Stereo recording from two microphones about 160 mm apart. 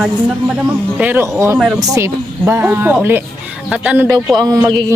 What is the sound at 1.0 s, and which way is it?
Speech, 10° right (ahead or behind).